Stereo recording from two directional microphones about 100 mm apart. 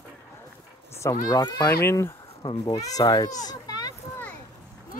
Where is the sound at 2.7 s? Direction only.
35° left (ahead or behind).